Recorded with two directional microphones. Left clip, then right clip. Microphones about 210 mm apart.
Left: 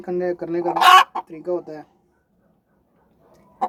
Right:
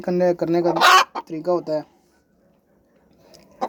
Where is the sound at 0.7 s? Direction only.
10° left (ahead or behind).